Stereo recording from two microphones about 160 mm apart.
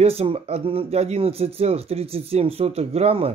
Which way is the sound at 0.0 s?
40° right (ahead or behind).